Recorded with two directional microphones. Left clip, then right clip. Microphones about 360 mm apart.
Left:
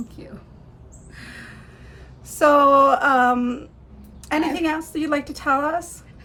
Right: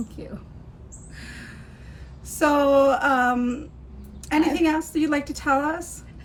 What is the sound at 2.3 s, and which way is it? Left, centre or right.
A woman's voice, centre.